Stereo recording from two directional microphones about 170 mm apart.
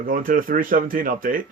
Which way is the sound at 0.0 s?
55° right (ahead or behind).